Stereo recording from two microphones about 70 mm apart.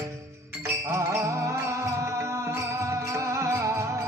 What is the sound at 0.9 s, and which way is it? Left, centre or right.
Music, right.